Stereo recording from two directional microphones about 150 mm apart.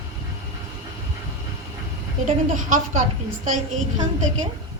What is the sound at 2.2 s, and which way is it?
Speech, 55° right (ahead or behind).